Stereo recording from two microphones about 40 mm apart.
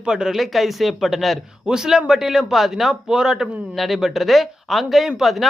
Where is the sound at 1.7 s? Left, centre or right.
Centre.